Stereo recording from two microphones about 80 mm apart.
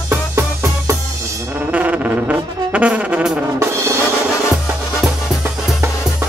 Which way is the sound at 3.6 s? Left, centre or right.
Right.